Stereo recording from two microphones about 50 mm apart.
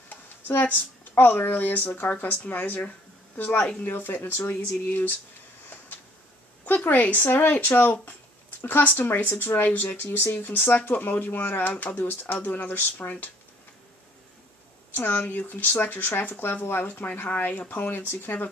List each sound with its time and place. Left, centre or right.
0.1 s speech: left
6.6 s speech: left
15.0 s speech: left